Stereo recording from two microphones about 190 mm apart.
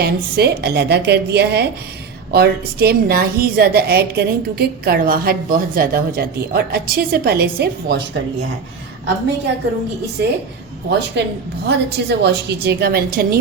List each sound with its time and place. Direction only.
0.0 s a woman's voice: 60° right (ahead or behind)
10.2 s a woman's voice: 60° right (ahead or behind)